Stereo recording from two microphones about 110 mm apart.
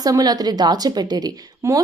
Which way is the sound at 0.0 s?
35° right (ahead or behind).